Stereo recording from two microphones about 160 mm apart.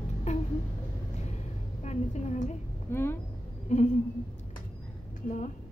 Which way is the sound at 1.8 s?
45° left (ahead or behind).